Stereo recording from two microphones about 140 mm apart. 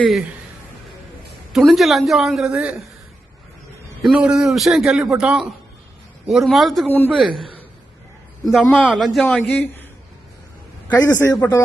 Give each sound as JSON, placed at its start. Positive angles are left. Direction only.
{"t": 0.0, "sound": "a man's voice", "side_deg": 0}
{"t": 1.5, "sound": "a man's voice", "side_deg": 0}
{"t": 4.0, "sound": "a man's voice", "side_deg": -5}
{"t": 6.8, "sound": "a man's voice", "side_deg": 15}
{"t": 7.1, "sound": "a man's voice", "side_deg": 0}
{"t": 8.6, "sound": "a man's voice", "side_deg": 10}
{"t": 8.9, "sound": "a man's voice", "side_deg": 0}
{"t": 10.8, "sound": "a man's voice", "side_deg": 20}